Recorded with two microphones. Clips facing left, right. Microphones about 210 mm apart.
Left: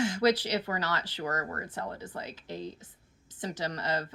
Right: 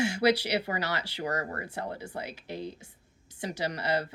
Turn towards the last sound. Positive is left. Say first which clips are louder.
# right 3 dB
turn(degrees=-10)  # may be behind; listen again after turning